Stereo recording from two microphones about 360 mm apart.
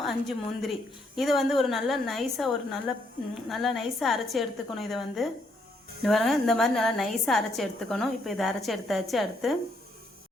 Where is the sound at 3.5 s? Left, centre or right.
Centre.